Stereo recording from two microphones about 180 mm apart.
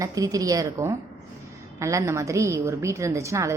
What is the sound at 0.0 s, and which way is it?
A woman's voice, 20° right (ahead or behind).